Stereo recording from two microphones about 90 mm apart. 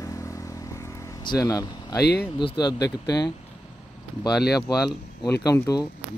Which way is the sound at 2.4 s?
50° left (ahead or behind).